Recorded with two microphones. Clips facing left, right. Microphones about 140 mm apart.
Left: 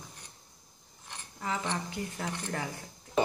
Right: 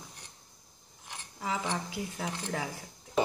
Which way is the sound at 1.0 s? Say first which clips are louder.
Even; 5° right (ahead or behind).